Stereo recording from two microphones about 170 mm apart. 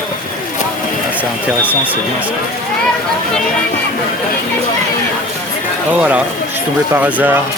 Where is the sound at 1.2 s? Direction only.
10° right (ahead or behind).